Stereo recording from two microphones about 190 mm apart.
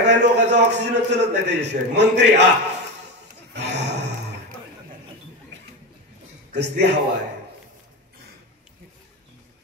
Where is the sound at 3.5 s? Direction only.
65° right (ahead or behind).